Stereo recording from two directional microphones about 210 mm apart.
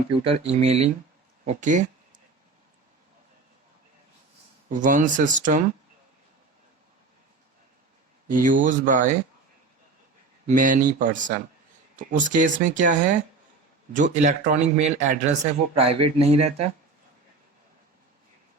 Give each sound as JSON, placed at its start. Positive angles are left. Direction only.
{"t": 0.1, "sound": "speech", "side_deg": -30}
{"t": 4.7, "sound": "speech", "side_deg": -40}
{"t": 8.3, "sound": "speech", "side_deg": -40}
{"t": 10.4, "sound": "speech", "side_deg": -40}